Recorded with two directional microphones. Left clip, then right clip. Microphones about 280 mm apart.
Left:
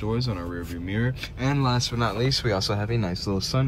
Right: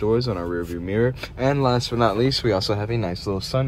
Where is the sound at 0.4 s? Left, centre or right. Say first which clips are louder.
Right 7 dB; right.